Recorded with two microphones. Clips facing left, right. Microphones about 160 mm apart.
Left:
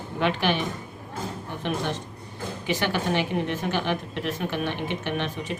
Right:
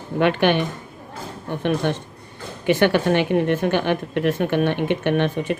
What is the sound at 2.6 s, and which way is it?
A woman's voice, 60° right (ahead or behind).